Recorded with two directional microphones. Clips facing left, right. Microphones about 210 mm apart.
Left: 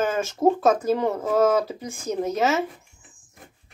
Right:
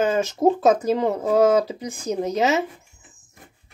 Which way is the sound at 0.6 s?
15° right (ahead or behind).